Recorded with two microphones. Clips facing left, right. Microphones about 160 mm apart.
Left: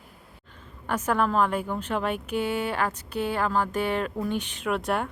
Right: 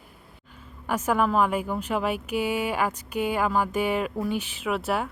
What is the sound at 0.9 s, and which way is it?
A woman's voice, 10° right (ahead or behind).